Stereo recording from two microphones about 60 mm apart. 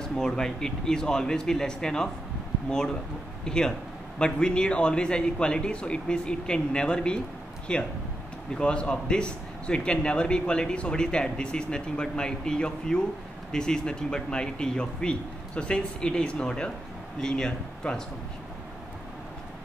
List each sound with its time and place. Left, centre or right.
0.0 s a man's voice: centre
3.4 s a man's voice: centre